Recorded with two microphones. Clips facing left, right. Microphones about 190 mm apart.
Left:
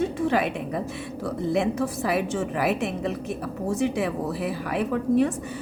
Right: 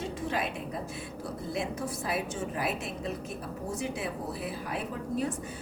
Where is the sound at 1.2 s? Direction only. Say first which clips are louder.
Left 11 dB; 75° left (ahead or behind).